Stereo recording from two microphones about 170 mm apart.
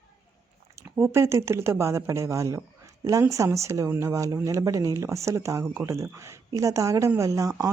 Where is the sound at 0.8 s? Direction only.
15° right (ahead or behind).